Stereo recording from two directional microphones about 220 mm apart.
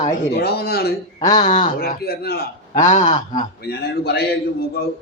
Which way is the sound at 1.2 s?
20° left (ahead or behind).